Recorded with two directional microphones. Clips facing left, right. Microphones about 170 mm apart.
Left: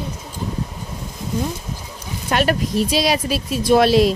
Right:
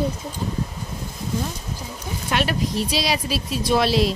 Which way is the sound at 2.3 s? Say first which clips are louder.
Left 4 dB; 50° left (ahead or behind).